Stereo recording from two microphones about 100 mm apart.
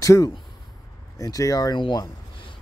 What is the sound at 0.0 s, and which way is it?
Speech, 35° left (ahead or behind).